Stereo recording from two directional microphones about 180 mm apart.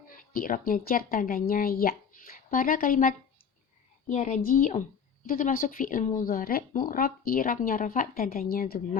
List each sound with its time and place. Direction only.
0.1 s speech: 50° left (ahead or behind)